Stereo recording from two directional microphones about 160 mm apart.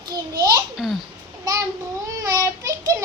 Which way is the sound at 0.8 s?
Centre (ahead or behind).